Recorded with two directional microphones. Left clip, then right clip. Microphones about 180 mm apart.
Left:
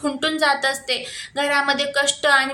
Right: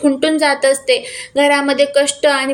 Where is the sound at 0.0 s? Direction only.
10° right (ahead or behind).